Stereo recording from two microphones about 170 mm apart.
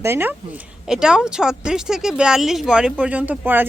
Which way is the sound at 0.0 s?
15° right (ahead or behind).